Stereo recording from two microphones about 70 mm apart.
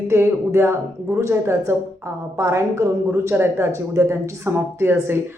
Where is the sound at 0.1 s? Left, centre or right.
Right.